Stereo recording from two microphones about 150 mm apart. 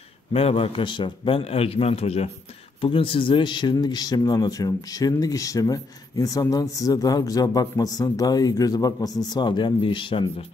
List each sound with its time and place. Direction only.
0.3 s a man's voice: 40° left (ahead or behind)